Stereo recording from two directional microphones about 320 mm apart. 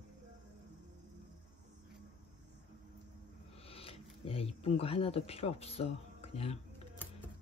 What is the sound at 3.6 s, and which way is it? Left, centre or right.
Speech, centre.